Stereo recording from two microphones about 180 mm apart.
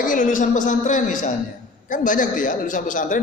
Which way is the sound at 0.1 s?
45° left (ahead or behind).